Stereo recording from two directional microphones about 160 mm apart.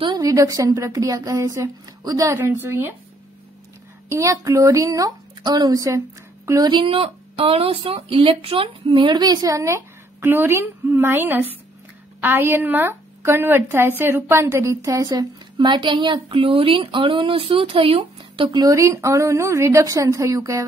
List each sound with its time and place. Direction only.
0.0 s speech: 25° right (ahead or behind)
4.1 s speech: 20° right (ahead or behind)